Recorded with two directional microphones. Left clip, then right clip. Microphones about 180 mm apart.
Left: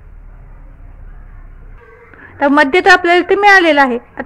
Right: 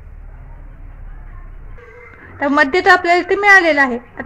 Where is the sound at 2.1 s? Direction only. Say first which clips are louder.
Left 3 dB; 35° left (ahead or behind).